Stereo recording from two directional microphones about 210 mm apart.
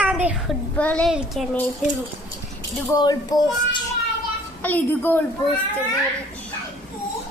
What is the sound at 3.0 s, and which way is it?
Speech, 20° left (ahead or behind).